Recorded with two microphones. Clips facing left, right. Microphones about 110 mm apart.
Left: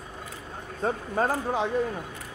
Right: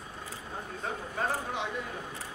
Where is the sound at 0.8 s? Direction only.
40° left (ahead or behind).